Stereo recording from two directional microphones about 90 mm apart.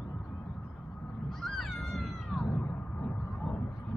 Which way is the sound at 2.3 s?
20° left (ahead or behind).